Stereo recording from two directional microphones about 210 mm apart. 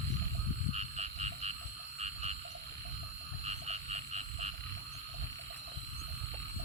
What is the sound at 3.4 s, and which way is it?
Frog, 30° right (ahead or behind).